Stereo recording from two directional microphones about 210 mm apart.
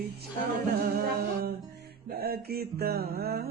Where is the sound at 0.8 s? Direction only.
45° right (ahead or behind).